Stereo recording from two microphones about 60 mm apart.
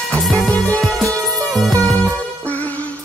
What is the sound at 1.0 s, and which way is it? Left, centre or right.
Music, centre.